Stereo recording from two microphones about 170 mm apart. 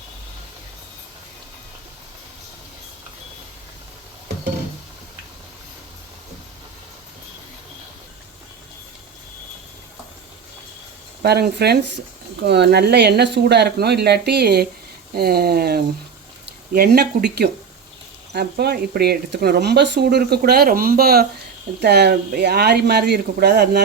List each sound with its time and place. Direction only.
11.2 s speech: 70° right (ahead or behind)